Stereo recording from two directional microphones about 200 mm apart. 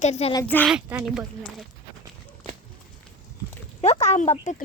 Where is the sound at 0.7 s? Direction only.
5° right (ahead or behind).